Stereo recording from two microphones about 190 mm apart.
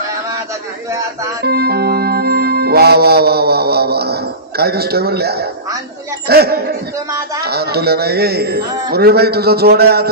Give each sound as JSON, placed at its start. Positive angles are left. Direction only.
{"t": 0.9, "sound": "speech", "side_deg": -15}
{"t": 1.4, "sound": "music", "side_deg": -55}
{"t": 6.2, "sound": "speech", "side_deg": -55}